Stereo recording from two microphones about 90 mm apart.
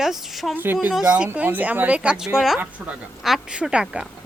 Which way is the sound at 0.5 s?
20° right (ahead or behind).